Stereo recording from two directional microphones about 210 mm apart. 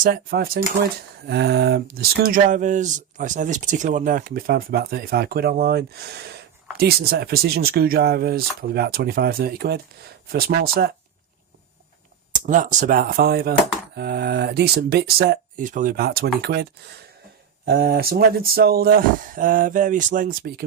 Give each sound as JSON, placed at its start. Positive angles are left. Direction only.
{"t": 0.0, "sound": "speech", "side_deg": -45}
{"t": 12.3, "sound": "speech", "side_deg": -35}